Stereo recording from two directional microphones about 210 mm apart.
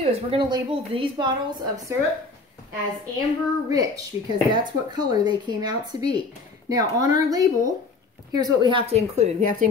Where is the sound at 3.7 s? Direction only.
15° right (ahead or behind).